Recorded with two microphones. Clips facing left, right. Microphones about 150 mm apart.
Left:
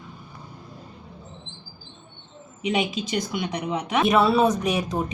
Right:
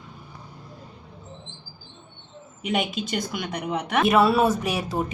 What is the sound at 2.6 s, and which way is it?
Speech, centre (ahead or behind).